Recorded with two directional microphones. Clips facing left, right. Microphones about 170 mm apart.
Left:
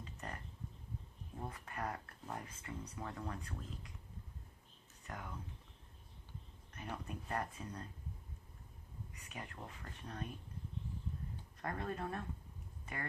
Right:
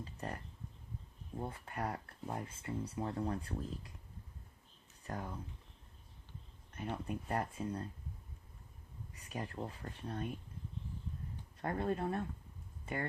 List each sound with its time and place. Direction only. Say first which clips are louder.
0.0 s a sound: right 5 dB; 30° right (ahead or behind)
1.4 s speech: right 3 dB; 30° right (ahead or behind)
5.0 s speech: right 6 dB; 35° right (ahead or behind)
6.7 s speech: right 5 dB; 25° right (ahead or behind)
9.3 s speech: right 8 dB; 35° right (ahead or behind)
11.6 s speech: right 6 dB; 30° right (ahead or behind)
12.8 s a sound: right 7 dB; 30° right (ahead or behind)